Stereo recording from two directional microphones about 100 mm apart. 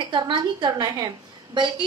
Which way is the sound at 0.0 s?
50° right (ahead or behind).